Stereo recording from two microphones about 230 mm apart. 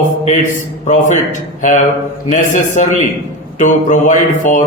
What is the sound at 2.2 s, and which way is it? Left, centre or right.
A man's voice, left.